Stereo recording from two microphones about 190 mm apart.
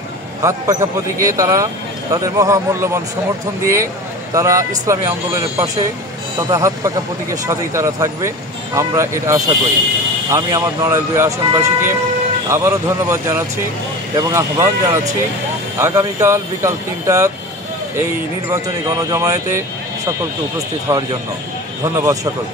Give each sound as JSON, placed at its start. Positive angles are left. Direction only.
{"t": 0.4, "sound": "a man's voice", "side_deg": -15}
{"t": 18.5, "sound": "a man's voice", "side_deg": -15}